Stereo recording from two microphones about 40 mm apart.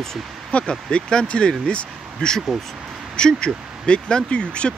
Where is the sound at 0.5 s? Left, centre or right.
Left.